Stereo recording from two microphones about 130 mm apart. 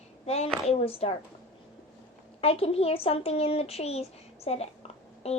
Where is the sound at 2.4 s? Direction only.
50° left (ahead or behind).